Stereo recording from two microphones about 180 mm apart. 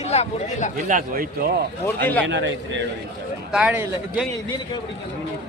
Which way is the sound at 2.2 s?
90° right.